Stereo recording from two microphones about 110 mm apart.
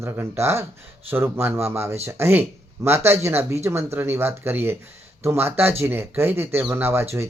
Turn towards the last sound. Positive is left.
turn(degrees=-20)  # may be behind; listen again after turning